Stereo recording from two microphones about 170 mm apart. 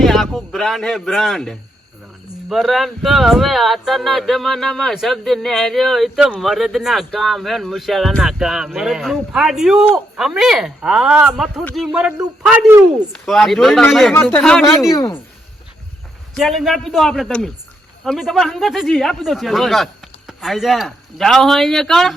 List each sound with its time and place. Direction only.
0.0 s speech: centre (ahead or behind)
13.1 s speech: centre (ahead or behind)
14.1 s speech: 10° left (ahead or behind)
14.9 s speech: 20° left (ahead or behind)
16.3 s speech: centre (ahead or behind)